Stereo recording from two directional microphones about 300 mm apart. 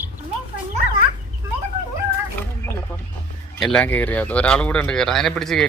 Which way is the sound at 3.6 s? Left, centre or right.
Centre.